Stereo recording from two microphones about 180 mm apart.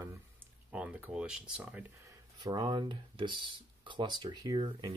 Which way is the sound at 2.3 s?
25° right (ahead or behind).